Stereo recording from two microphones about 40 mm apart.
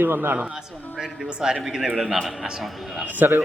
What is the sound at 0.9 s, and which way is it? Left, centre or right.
Speech, centre.